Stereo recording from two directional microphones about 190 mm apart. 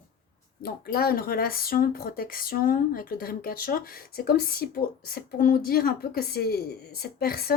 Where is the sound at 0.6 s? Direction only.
50° left (ahead or behind).